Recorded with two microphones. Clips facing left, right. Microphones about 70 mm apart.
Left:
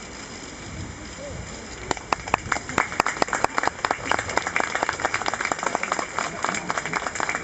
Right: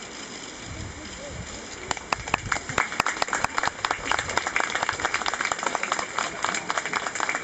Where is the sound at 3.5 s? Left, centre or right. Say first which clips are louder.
Left 2 dB; centre.